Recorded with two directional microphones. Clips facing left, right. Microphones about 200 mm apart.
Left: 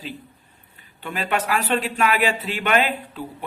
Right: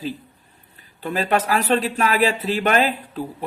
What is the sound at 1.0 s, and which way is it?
Speech, 35° right (ahead or behind).